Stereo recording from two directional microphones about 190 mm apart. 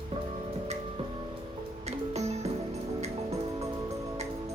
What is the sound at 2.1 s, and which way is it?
Music, 35° right (ahead or behind).